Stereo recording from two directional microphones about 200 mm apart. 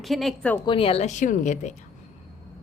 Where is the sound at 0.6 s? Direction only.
25° left (ahead or behind).